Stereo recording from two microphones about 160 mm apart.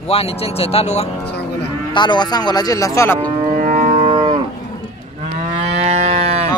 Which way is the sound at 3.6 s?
45° right (ahead or behind).